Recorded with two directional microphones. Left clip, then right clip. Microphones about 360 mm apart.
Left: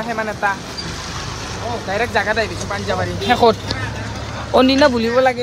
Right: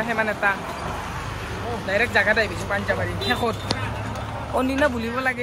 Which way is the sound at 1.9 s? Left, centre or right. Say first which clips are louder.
Left 1 dB; centre.